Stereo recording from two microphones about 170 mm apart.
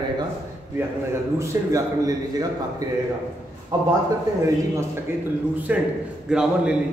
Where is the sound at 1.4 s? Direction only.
20° right (ahead or behind).